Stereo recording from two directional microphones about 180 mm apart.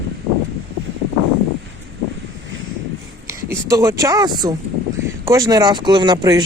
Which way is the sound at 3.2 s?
15° right (ahead or behind).